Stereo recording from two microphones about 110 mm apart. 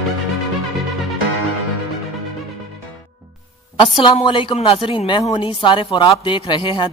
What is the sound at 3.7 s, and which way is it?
Speech, 50° left (ahead or behind).